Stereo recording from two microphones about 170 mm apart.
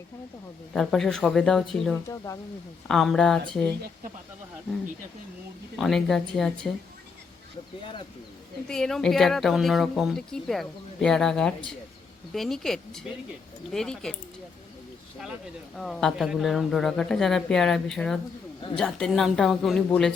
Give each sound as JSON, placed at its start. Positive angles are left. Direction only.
{"t": 0.7, "sound": "speech", "side_deg": 0}
{"t": 2.0, "sound": "speech", "side_deg": 20}
{"t": 2.8, "sound": "speech", "side_deg": 0}
{"t": 5.7, "sound": "speech", "side_deg": 0}
{"t": 7.8, "sound": "speech", "side_deg": 30}
{"t": 8.6, "sound": "speech", "side_deg": 5}
{"t": 15.7, "sound": "speech", "side_deg": 5}